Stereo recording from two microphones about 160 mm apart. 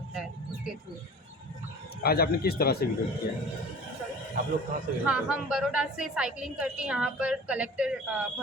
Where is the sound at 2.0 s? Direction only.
75° left (ahead or behind).